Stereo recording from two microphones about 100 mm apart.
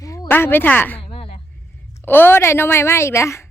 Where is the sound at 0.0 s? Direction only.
35° left (ahead or behind).